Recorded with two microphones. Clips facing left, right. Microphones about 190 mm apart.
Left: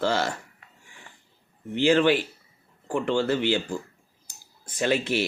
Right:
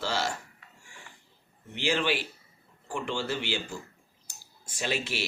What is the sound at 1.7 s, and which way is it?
Speech, 55° left (ahead or behind).